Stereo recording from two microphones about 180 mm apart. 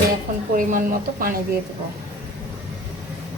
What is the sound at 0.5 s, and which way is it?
Speech, 50° right (ahead or behind).